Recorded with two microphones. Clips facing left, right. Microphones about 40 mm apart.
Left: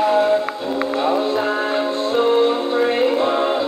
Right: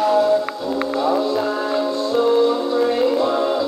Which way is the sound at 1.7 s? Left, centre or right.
Left.